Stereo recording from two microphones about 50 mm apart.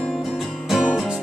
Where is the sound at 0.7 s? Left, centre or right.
Centre.